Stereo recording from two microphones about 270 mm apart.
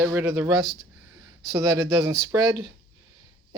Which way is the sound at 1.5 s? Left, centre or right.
Centre.